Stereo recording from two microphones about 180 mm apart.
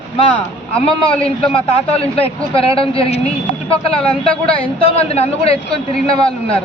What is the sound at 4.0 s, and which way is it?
Speech, 5° left (ahead or behind).